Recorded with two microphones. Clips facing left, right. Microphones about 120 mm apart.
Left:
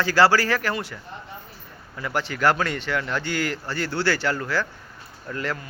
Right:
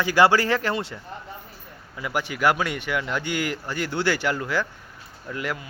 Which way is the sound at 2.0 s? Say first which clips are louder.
Even; 10° right (ahead or behind).